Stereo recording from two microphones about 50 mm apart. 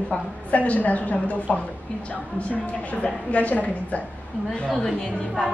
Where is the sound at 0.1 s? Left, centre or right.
Left.